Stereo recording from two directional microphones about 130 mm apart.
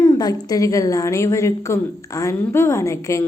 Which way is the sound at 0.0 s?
30° left (ahead or behind).